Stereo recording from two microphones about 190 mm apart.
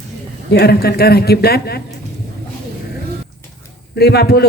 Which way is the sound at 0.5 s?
55° left (ahead or behind).